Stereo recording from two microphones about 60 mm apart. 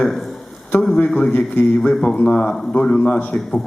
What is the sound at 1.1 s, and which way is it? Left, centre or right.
A man's voice, centre.